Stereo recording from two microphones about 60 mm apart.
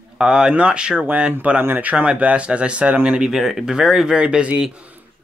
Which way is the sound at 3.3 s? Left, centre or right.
Centre.